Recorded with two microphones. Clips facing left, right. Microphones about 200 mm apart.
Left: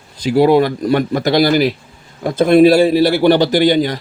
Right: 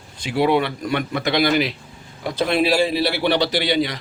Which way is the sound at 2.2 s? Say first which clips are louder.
Left 10 dB; 50° left (ahead or behind).